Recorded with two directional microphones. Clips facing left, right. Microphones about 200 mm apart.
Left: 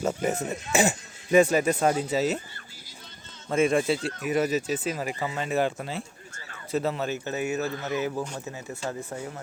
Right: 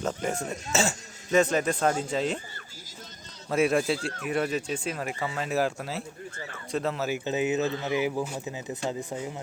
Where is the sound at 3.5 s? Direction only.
Centre (ahead or behind).